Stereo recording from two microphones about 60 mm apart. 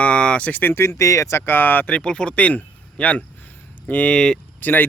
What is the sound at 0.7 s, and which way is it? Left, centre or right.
Speech, left.